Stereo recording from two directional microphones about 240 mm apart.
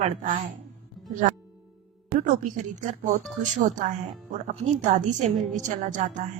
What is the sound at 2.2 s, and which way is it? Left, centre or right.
Speech, right.